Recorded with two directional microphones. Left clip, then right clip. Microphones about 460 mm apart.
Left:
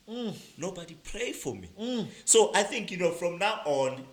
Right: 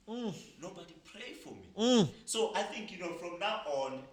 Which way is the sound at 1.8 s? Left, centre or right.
Right.